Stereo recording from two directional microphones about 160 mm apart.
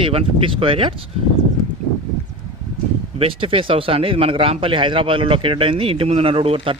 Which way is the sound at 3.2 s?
35° right (ahead or behind).